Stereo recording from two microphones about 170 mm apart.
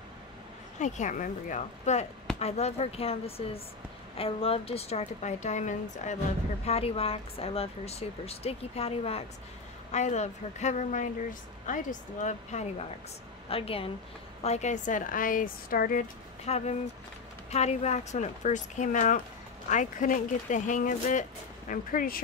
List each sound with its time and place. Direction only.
0.7 s speech: 45° left (ahead or behind)
16.4 s speech: 40° left (ahead or behind); by 22.2 s 55° left (ahead or behind)